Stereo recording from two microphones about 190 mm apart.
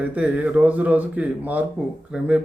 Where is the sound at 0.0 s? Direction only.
5° right (ahead or behind).